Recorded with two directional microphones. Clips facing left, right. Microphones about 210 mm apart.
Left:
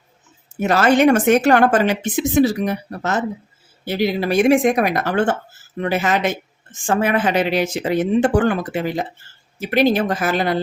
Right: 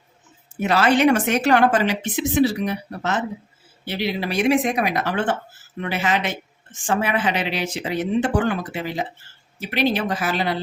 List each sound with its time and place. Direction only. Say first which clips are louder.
0.6 s speech: left 3 dB; 45° left (ahead or behind)